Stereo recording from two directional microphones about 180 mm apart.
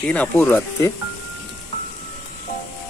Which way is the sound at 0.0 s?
5° left (ahead or behind).